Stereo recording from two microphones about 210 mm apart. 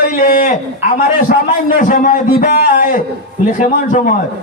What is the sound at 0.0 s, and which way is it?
A man's voice, 40° left (ahead or behind).